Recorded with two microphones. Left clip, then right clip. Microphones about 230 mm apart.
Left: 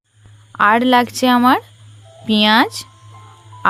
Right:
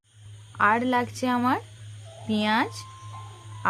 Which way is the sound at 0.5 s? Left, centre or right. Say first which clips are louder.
Left 10 dB; left.